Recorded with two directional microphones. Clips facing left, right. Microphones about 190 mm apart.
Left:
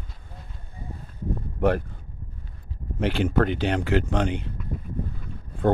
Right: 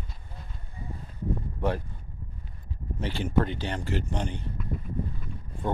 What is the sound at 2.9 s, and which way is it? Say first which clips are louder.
Speech: left 5 dB; 70° left (ahead or behind).